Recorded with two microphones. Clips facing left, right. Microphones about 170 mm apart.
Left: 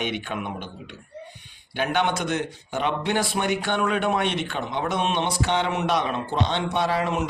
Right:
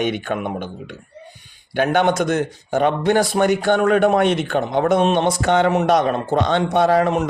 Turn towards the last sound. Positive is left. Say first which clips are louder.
# right 8 dB
turn(degrees=-45)  # may be behind; listen again after turning